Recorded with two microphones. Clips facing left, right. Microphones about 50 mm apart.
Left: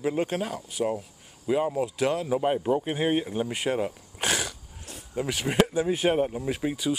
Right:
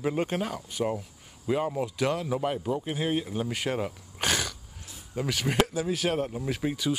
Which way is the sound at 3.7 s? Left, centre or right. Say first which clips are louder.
Left 3 dB; centre.